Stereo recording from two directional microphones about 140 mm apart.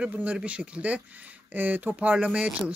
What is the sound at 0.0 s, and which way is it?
Speech, 10° right (ahead or behind).